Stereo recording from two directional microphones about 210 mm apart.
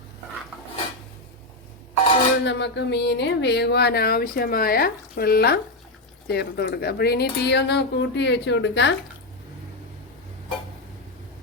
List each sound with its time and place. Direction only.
2.4 s speech: 55° left (ahead or behind)